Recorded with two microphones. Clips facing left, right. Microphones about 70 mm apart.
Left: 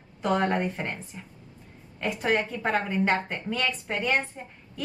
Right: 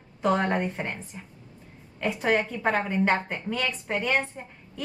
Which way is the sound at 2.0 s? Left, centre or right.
Centre.